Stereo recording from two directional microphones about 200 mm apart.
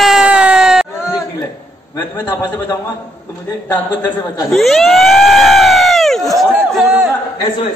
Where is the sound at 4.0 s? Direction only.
10° left (ahead or behind).